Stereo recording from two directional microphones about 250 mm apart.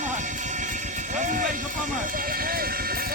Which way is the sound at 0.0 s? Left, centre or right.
Right.